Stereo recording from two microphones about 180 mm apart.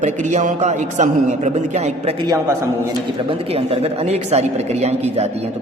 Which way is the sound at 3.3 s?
30° right (ahead or behind).